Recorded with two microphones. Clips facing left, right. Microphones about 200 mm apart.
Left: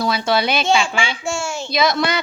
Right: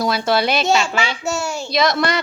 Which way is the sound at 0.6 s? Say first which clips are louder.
Even; 40° right (ahead or behind).